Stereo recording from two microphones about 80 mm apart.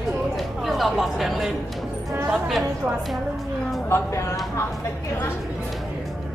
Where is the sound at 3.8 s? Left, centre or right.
Left.